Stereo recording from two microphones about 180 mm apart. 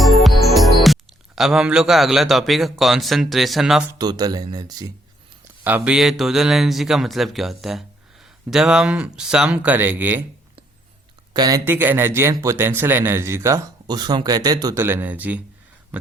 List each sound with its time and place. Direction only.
0.0 s music: centre (ahead or behind)
1.4 s speech: 5° right (ahead or behind)
3.9 s speech: 20° right (ahead or behind)
5.6 s a man's voice: 10° right (ahead or behind)
11.3 s a man's voice: 20° right (ahead or behind)